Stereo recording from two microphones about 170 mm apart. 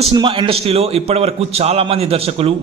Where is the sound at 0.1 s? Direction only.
30° right (ahead or behind).